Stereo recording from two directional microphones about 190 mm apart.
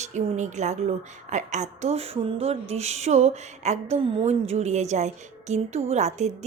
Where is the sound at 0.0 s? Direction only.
35° right (ahead or behind).